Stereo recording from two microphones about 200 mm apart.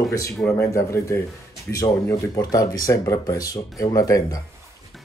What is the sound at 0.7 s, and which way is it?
Speech, 15° left (ahead or behind).